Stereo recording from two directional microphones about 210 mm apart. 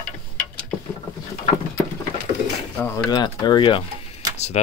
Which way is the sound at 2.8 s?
10° left (ahead or behind).